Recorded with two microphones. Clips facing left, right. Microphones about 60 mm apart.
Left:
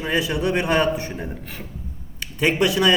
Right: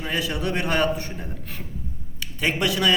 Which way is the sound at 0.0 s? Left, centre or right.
Centre.